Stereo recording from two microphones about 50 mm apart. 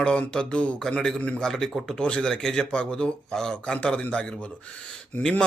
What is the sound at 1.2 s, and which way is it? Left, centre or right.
Speech, left.